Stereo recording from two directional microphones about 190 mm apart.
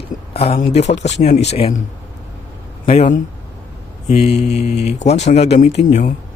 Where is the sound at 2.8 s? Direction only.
35° left (ahead or behind).